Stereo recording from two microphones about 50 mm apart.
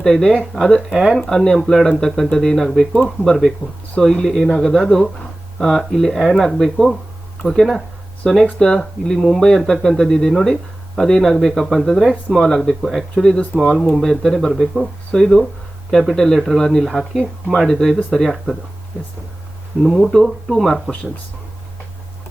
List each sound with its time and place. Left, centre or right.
0.0 s speech: centre
0.9 s speech: centre
1.2 s speech: centre
2.9 s speech: centre
19.8 s speech: centre